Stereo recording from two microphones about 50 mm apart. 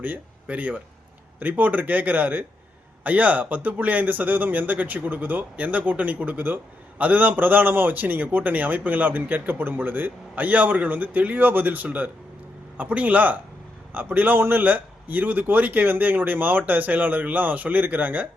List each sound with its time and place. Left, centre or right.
0.0 s a man's voice: right